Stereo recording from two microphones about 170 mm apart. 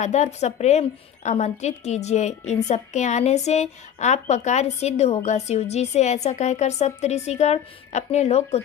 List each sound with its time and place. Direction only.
0.0 s a woman's voice: 40° left (ahead or behind)